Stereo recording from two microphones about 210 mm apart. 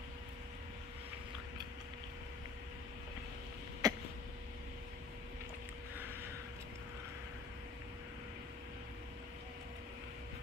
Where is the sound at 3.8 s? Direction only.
15° right (ahead or behind).